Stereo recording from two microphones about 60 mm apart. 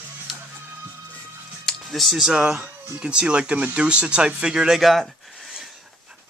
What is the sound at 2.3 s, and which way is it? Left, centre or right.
Speech, centre.